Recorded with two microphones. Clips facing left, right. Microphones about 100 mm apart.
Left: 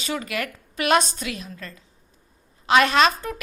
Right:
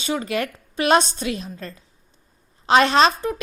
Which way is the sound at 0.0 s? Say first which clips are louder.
Right 4 dB; 25° right (ahead or behind).